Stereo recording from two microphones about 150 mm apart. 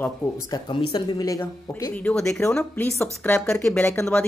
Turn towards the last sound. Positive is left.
turn(degrees=5)  # may be behind; listen again after turning